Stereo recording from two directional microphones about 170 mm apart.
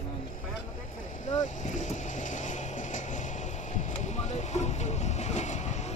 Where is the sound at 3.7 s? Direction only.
45° left (ahead or behind).